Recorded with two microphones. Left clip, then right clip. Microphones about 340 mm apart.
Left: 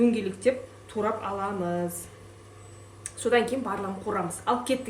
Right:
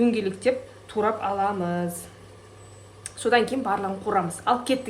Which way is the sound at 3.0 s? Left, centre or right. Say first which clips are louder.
Right 3 dB; right.